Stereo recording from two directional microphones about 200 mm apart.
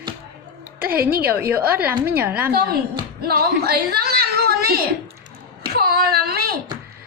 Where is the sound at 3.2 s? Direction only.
50° right (ahead or behind).